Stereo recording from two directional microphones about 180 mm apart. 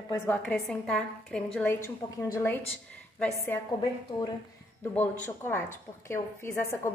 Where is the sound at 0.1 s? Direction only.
10° left (ahead or behind).